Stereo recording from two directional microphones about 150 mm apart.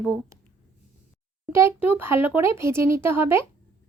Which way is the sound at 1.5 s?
15° right (ahead or behind).